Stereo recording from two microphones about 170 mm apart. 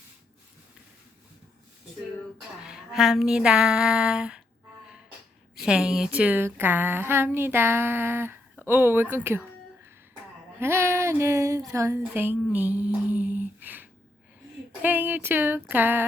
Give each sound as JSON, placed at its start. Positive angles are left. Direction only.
{"t": 2.6, "sound": "a sound", "side_deg": -5}
{"t": 5.6, "sound": "speech", "side_deg": -5}
{"t": 10.6, "sound": "speech", "side_deg": -15}